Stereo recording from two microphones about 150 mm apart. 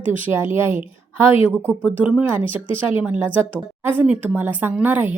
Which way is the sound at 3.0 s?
10° right (ahead or behind).